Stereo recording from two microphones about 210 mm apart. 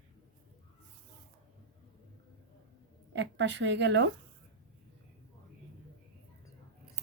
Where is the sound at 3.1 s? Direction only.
60° right (ahead or behind).